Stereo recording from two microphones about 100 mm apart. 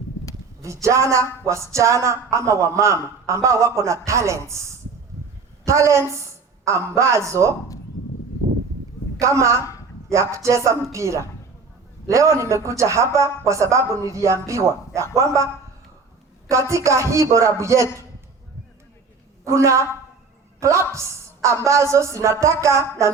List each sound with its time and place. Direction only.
0.6 s speech: 30° right (ahead or behind)
5.6 s a woman's voice: 30° right (ahead or behind)
9.1 s a woman's voice: 30° right (ahead or behind)
16.5 s speech: 30° right (ahead or behind)
19.5 s a woman's voice: 30° right (ahead or behind)